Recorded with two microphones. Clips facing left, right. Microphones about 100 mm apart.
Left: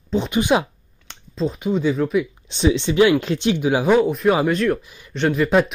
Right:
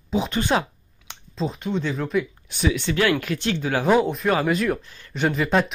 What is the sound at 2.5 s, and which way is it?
Speech, 25° left (ahead or behind).